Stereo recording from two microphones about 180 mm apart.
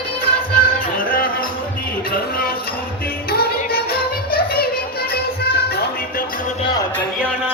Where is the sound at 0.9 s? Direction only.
55° left (ahead or behind).